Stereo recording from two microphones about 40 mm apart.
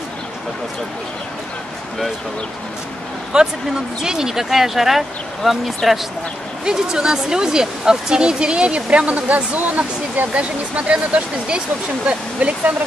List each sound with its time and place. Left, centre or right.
3.3 s speech: centre
5.8 s speech: centre
6.6 s speech: centre; by 10.2 s right
10.3 s speech: right